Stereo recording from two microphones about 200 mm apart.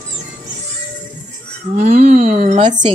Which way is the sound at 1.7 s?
40° right (ahead or behind).